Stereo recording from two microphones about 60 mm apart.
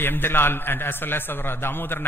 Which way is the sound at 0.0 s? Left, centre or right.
Left.